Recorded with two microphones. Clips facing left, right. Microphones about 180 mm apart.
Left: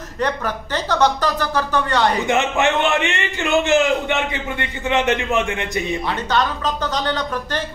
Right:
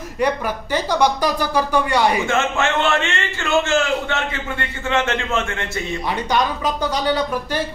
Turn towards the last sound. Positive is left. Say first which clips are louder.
# right 2 dB
turn(degrees=-10)  # may be behind; listen again after turning